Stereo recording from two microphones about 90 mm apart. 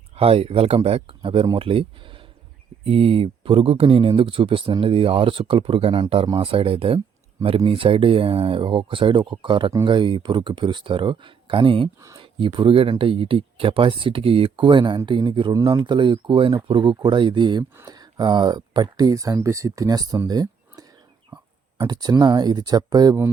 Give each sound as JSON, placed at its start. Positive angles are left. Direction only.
{"t": 0.2, "sound": "speech", "side_deg": -90}
{"t": 6.4, "sound": "speech", "side_deg": -90}
{"t": 17.8, "sound": "speech", "side_deg": -50}
{"t": 21.3, "sound": "a sound", "side_deg": -55}
{"t": 22.2, "sound": "speech", "side_deg": -50}